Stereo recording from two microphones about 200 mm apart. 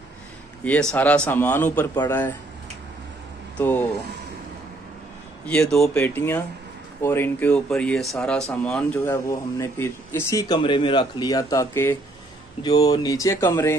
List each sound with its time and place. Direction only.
0.7 s speech: 5° left (ahead or behind)
3.5 s speech: 10° left (ahead or behind)
5.5 s speech: 5° left (ahead or behind)